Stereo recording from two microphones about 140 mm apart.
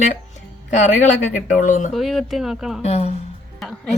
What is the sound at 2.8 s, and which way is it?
Speech, 50° left (ahead or behind).